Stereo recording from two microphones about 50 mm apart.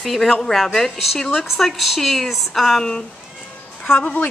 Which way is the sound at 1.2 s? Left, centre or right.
Centre.